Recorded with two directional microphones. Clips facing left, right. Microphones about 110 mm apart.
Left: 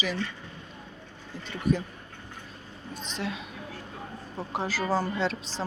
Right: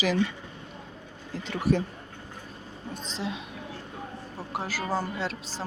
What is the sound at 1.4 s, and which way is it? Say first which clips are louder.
Speech: right 2 dB; 70° right (ahead or behind).